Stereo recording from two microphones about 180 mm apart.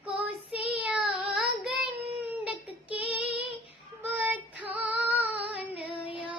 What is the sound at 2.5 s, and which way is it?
Child singing, 10° right (ahead or behind).